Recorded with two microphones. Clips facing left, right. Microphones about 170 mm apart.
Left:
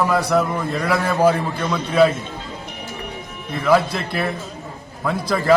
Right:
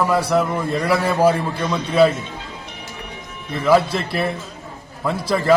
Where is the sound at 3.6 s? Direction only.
Centre (ahead or behind).